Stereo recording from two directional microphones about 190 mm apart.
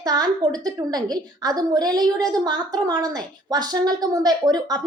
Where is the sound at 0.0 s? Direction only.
20° right (ahead or behind).